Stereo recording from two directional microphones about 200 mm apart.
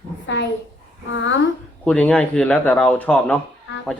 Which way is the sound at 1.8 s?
5° left (ahead or behind).